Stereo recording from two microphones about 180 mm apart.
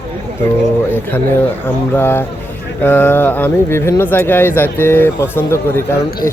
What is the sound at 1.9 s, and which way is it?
Speech, 10° left (ahead or behind).